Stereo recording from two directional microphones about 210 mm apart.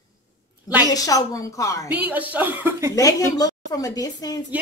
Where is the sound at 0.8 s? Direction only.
15° left (ahead or behind).